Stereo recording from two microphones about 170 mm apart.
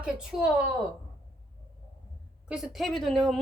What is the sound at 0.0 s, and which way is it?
Speech, 5° right (ahead or behind).